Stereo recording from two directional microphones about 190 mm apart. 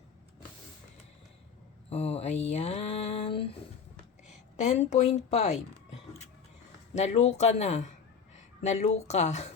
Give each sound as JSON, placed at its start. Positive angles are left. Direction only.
{"t": 1.9, "sound": "mantra", "side_deg": 35}
{"t": 2.5, "sound": "a sound", "side_deg": 35}
{"t": 4.5, "sound": "a woman's voice", "side_deg": 35}